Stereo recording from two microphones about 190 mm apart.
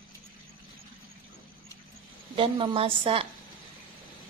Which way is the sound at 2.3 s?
25° right (ahead or behind).